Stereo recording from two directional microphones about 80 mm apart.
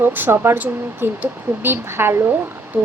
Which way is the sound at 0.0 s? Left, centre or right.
Right.